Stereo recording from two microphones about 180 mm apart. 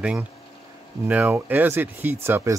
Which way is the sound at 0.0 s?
5° right (ahead or behind).